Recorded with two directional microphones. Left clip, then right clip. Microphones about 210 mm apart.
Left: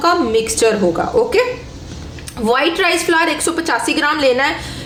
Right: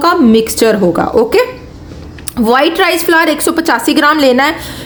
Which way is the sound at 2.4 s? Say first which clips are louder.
Right 5 dB; 45° right (ahead or behind).